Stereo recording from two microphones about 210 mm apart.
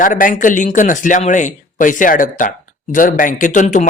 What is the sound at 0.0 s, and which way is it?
Speech, 40° left (ahead or behind).